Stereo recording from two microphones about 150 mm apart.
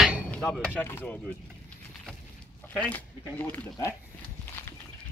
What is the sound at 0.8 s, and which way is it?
Speech, 15° left (ahead or behind).